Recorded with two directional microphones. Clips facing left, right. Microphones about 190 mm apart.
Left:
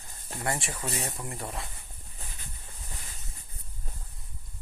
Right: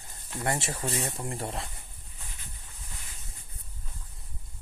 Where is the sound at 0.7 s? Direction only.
35° right (ahead or behind).